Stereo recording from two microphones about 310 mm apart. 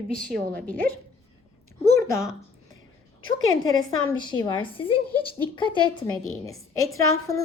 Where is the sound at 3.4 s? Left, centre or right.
Left.